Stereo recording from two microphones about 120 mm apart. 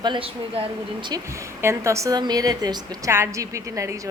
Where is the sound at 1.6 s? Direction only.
25° right (ahead or behind).